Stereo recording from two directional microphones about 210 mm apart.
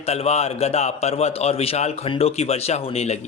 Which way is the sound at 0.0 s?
30° left (ahead or behind).